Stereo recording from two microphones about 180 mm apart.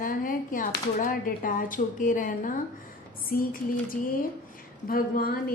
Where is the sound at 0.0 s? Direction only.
50° left (ahead or behind).